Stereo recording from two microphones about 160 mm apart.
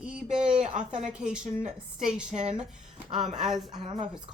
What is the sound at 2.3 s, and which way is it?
Speech, 45° right (ahead or behind).